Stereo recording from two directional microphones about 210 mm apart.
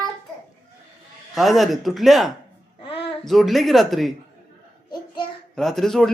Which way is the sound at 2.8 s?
25° left (ahead or behind).